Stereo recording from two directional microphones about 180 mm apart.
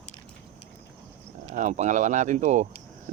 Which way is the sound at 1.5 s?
45° right (ahead or behind).